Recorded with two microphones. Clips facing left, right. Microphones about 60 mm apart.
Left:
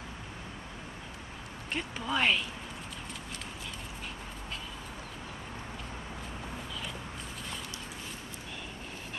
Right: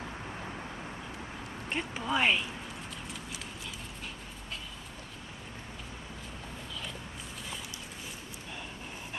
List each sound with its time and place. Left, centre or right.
1.7 s speech: centre